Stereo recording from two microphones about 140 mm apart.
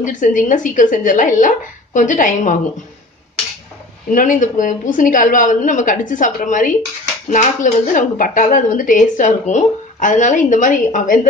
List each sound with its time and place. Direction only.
0.0 s a woman's voice: 65° left (ahead or behind)
4.1 s a woman's voice: 70° left (ahead or behind)